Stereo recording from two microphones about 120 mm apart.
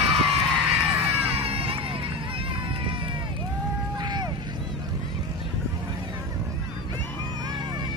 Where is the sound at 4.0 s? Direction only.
35° right (ahead or behind).